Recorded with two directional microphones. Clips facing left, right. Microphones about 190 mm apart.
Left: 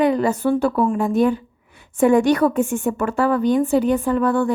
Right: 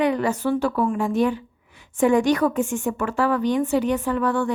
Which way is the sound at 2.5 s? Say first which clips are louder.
Left 3 dB; 60° left (ahead or behind).